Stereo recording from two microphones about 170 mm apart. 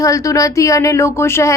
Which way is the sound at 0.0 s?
20° left (ahead or behind).